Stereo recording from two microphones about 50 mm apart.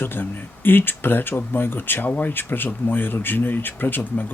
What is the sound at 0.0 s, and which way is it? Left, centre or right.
Speech, left.